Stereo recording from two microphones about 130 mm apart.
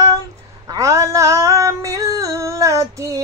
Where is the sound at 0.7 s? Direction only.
25° right (ahead or behind).